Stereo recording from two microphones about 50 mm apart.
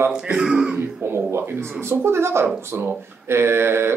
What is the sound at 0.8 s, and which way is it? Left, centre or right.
Speech, right.